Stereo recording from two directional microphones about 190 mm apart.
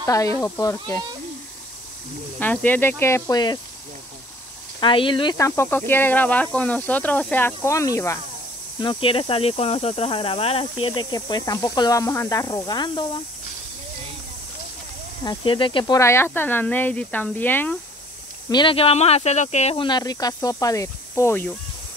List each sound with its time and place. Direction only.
0.0 s speech: 15° left (ahead or behind)
2.3 s speech: 10° left (ahead or behind)
4.7 s speech: 25° left (ahead or behind)
5.6 s speech: 10° left (ahead or behind)
8.7 s speech: 25° left (ahead or behind)
15.2 s speech: 25° left (ahead or behind); by 17.7 s 10° left (ahead or behind)
18.5 s speech: 25° left (ahead or behind)